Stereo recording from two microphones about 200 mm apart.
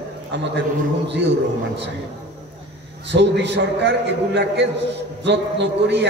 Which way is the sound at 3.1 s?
60° right (ahead or behind).